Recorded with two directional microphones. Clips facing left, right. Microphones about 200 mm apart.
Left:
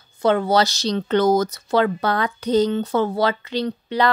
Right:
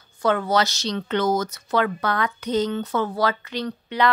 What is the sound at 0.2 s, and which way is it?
Speech, 25° left (ahead or behind).